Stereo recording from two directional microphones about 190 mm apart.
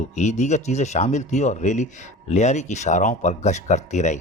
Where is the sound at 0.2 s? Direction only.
40° left (ahead or behind).